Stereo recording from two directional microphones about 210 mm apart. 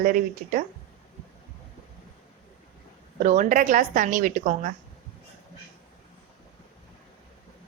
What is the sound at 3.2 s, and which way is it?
A woman's voice, 35° right (ahead or behind).